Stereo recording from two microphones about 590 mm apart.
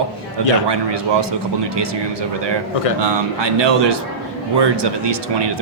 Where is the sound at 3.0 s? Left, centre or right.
Right.